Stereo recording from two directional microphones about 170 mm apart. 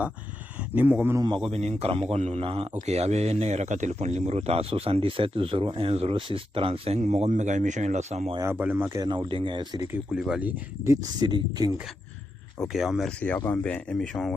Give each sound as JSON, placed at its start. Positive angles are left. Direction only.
{"t": 0.8, "sound": "a man's voice", "side_deg": -10}
{"t": 1.5, "sound": "speech", "side_deg": -35}
{"t": 8.4, "sound": "speech", "side_deg": -10}
{"t": 9.9, "sound": "speech", "side_deg": -5}
{"t": 10.8, "sound": "speech", "side_deg": -20}
{"t": 12.5, "sound": "speech", "side_deg": 0}